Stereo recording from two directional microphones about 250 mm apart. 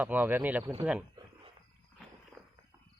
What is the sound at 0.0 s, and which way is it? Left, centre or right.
Speech, centre.